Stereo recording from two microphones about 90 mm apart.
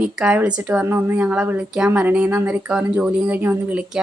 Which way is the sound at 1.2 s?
15° right (ahead or behind).